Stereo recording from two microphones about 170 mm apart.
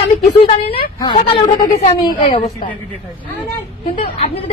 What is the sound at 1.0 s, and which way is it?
Speech, 30° left (ahead or behind).